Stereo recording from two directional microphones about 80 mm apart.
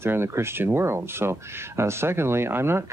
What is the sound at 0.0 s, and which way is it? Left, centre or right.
Speech, right.